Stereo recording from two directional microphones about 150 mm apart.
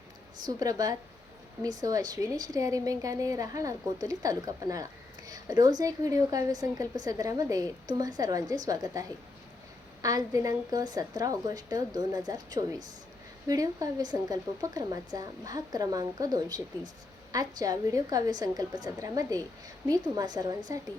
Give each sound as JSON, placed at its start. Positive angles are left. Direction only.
{"t": 0.6, "sound": "a woman's voice", "side_deg": -25}